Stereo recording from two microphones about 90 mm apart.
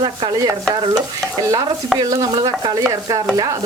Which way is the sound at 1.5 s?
40° right (ahead or behind).